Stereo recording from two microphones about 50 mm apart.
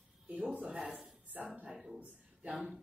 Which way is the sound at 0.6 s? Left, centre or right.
Centre.